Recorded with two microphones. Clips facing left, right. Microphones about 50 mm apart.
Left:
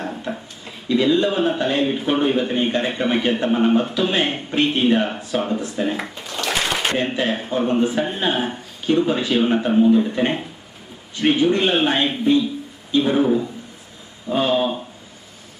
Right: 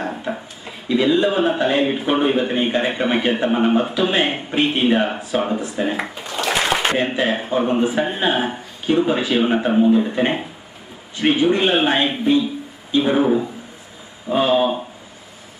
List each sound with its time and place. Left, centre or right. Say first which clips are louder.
0.1 s speech: right 2 dB; centre